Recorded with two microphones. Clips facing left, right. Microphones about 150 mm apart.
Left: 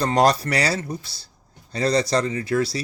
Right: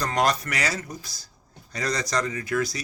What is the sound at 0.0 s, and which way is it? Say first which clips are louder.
Speech: left 6 dB; 35° left (ahead or behind).